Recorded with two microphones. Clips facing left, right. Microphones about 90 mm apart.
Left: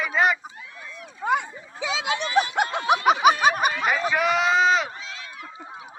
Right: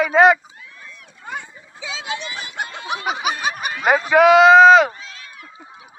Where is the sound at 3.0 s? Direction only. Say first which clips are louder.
Left 6 dB; 45° left (ahead or behind).